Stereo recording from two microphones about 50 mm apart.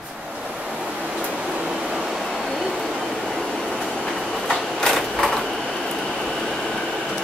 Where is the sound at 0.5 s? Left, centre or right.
Centre.